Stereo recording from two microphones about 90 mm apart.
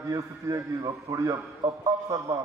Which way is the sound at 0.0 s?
35° right (ahead or behind).